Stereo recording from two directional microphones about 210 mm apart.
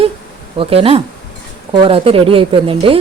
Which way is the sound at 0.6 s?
25° right (ahead or behind).